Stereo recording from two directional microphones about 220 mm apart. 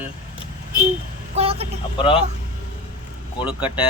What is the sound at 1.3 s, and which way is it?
Speech, 25° right (ahead or behind).